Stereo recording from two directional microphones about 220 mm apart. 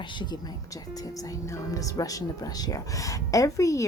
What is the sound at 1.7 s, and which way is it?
Speech, 15° left (ahead or behind).